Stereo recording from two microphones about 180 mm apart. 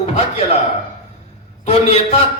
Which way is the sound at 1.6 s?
35° left (ahead or behind).